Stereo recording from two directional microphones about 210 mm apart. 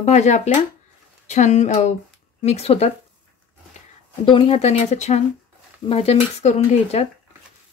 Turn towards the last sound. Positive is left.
turn(degrees=30)  # may be behind; listen again after turning